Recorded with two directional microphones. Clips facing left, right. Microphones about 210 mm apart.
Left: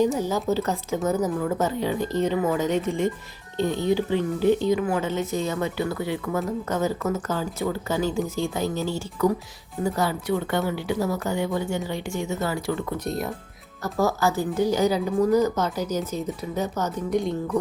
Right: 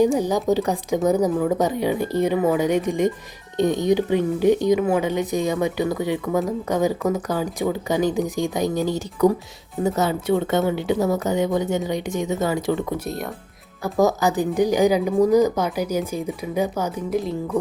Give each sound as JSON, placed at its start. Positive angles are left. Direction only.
{"t": 0.0, "sound": "a woman's voice", "side_deg": -15}
{"t": 13.1, "sound": "speech", "side_deg": 0}
{"t": 13.8, "sound": "a woman's voice", "side_deg": -15}